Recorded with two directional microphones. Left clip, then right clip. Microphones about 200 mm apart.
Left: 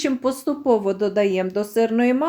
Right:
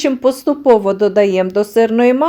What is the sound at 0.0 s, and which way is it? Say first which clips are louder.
Speech: right 8 dB; 30° right (ahead or behind).